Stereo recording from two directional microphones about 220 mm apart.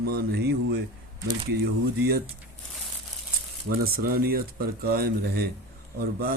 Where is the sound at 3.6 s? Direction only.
40° right (ahead or behind).